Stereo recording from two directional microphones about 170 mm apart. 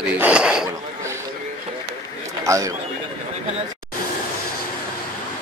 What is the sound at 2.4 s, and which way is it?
Speech, 20° right (ahead or behind).